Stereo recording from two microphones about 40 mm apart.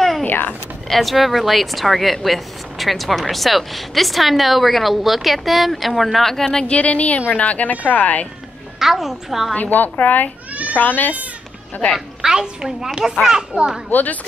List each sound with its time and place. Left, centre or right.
0.3 s a sound: left
0.8 s a woman's voice: centre
6.7 s speech: left
8.7 s a woman's voice: centre
9.6 s a woman's voice: left
12.2 s a woman's voice: centre
13.5 s a child's voice: right
13.8 s a woman's voice: left